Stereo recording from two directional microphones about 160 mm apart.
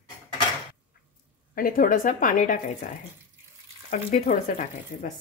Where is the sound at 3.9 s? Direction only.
50° left (ahead or behind).